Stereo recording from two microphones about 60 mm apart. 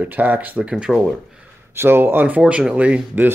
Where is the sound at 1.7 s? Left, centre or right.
Right.